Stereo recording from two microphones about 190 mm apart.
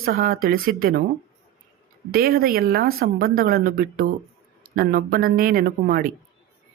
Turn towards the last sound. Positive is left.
turn(degrees=-50)  # may be behind; listen again after turning